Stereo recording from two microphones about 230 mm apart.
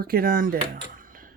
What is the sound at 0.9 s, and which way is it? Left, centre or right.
Music, right.